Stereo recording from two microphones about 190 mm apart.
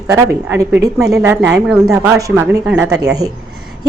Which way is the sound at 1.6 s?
5° right (ahead or behind).